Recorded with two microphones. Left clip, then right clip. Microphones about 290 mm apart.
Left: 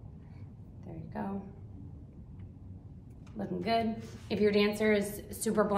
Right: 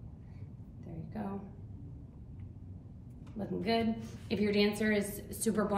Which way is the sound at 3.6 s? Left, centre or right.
Centre.